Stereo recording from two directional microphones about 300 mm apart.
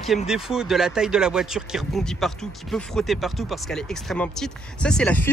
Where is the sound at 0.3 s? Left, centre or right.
Centre.